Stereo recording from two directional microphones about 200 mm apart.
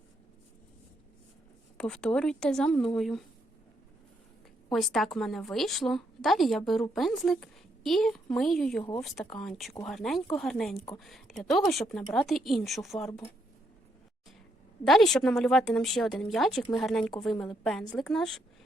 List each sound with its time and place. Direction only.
1.8 s a woman's voice: 5° left (ahead or behind)
4.7 s a woman's voice: centre (ahead or behind)
14.8 s a woman's voice: centre (ahead or behind)